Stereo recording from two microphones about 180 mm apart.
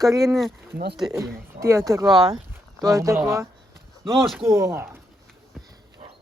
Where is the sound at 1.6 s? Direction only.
15° right (ahead or behind).